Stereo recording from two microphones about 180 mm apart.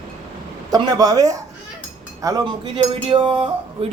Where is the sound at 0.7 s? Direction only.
20° right (ahead or behind).